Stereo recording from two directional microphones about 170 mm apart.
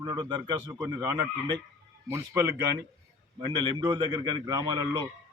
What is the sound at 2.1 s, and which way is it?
Speech, 15° right (ahead or behind).